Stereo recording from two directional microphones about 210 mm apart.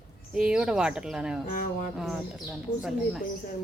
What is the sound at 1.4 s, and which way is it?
Speech, 45° left (ahead or behind).